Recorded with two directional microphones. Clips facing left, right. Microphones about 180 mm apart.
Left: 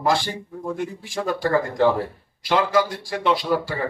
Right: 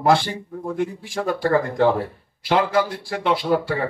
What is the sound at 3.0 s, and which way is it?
Speech, 60° right (ahead or behind).